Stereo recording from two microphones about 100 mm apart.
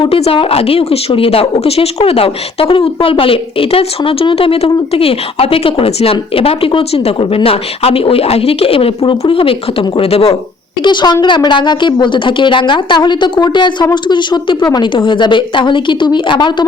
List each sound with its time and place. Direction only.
0.0 s speech: 70° left (ahead or behind)
10.8 s a woman's voice: 45° left (ahead or behind)